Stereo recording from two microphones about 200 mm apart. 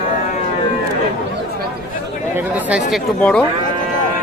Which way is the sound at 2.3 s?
5° right (ahead or behind).